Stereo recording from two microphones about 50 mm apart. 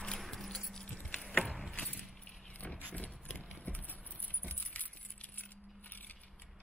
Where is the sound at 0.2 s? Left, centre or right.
Centre.